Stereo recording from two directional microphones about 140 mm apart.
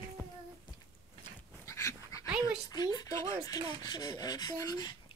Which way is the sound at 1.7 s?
20° left (ahead or behind).